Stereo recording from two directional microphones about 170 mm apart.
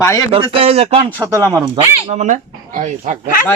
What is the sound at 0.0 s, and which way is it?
Speech, 15° left (ahead or behind).